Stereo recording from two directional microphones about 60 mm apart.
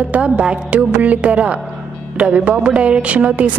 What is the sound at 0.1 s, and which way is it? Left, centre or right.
A woman's voice, centre.